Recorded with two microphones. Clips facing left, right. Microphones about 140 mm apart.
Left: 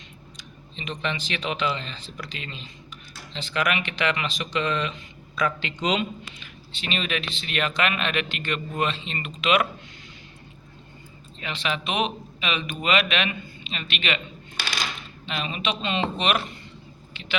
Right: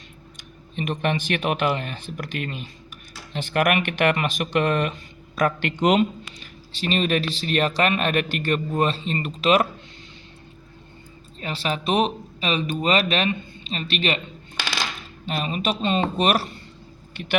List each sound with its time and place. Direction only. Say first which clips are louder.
0.3 s a man's voice: right 11 dB; 55° right (ahead or behind); by 9.6 s 35° right (ahead or behind)
11.3 s a man's voice: right 2 dB; 40° right (ahead or behind)
15.3 s a man's voice: right 4 dB; 40° right (ahead or behind)